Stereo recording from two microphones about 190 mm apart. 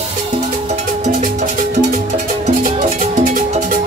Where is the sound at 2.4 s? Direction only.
40° right (ahead or behind).